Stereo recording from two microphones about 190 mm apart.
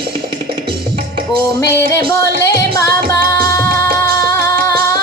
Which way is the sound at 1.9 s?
15° left (ahead or behind).